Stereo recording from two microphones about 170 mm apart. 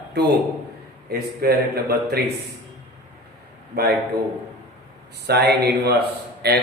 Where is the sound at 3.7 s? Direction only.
70° right (ahead or behind).